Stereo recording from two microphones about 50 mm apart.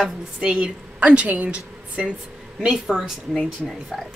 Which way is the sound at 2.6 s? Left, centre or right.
Centre.